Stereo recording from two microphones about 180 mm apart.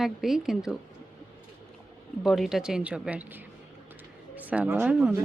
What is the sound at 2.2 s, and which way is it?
Speech, centre (ahead or behind).